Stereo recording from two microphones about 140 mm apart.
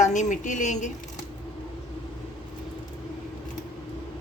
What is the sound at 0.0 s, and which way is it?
Speech, 60° left (ahead or behind).